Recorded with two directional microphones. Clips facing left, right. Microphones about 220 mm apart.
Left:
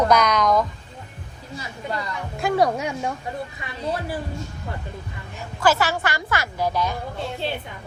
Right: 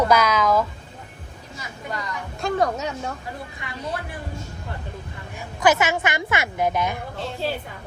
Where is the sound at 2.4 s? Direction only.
10° left (ahead or behind).